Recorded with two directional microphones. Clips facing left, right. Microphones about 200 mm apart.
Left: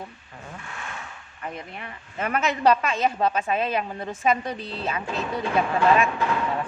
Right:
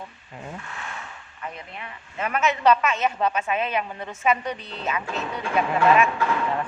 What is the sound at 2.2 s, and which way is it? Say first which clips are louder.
A woman's voice: even; 35° left (ahead or behind).